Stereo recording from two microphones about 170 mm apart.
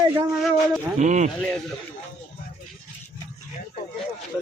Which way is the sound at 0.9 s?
45° right (ahead or behind).